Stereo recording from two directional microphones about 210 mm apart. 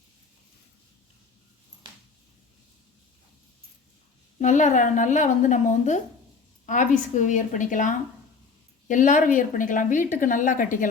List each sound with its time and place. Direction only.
4.4 s speech: 35° left (ahead or behind)